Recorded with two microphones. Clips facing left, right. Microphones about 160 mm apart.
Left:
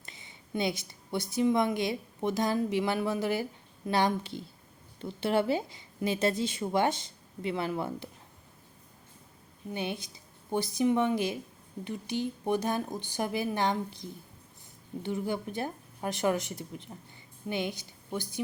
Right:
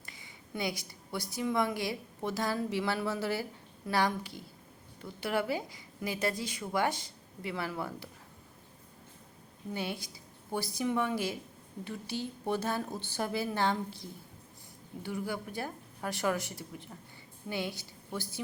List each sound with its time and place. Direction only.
0.0 s a woman's voice: 25° left (ahead or behind)
9.7 s a woman's voice: 20° left (ahead or behind)